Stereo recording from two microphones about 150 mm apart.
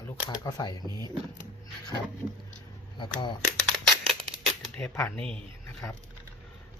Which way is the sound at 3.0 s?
30° left (ahead or behind).